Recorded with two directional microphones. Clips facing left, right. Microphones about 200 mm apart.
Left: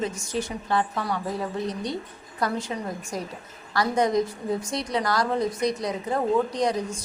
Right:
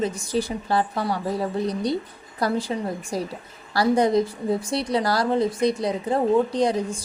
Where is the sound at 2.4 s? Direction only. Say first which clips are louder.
Right 4 dB; 35° right (ahead or behind).